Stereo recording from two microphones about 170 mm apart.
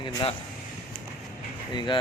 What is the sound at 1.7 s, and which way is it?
Speech, 25° left (ahead or behind).